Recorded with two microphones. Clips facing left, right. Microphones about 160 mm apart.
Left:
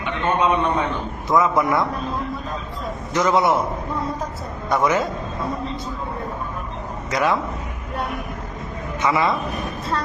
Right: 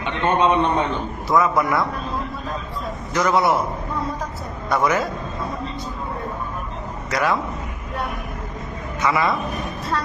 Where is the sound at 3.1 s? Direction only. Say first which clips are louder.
Left 1 dB; 20° left (ahead or behind).